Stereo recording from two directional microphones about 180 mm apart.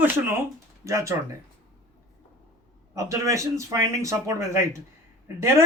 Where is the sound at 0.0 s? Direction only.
10° right (ahead or behind).